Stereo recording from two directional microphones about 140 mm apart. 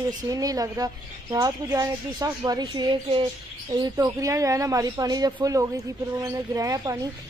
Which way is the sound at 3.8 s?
25° right (ahead or behind).